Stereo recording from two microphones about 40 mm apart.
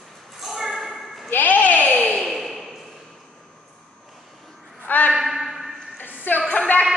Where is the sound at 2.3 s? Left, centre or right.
Centre.